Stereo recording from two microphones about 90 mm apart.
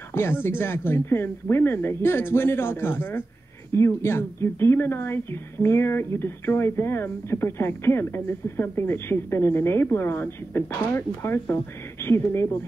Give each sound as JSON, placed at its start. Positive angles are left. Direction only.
{"t": 0.1, "sound": "a woman's voice", "side_deg": 30}